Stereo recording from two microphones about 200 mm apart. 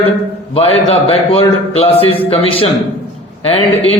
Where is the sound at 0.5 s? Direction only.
30° left (ahead or behind).